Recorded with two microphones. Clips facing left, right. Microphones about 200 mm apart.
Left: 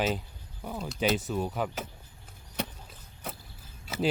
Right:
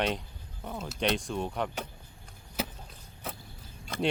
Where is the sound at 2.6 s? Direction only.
5° right (ahead or behind).